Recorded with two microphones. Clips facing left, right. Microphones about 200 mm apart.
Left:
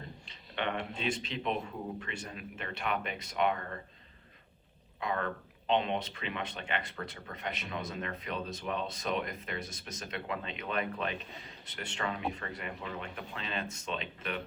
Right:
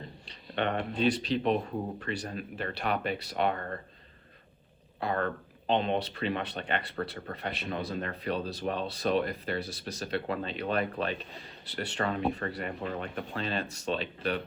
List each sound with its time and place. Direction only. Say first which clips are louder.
0.5 s speech: right 5 dB; 40° right (ahead or behind)
4.9 s speech: right 4 dB; 35° right (ahead or behind)